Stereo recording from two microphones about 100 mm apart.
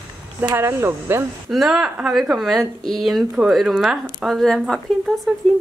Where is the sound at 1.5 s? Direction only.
5° right (ahead or behind).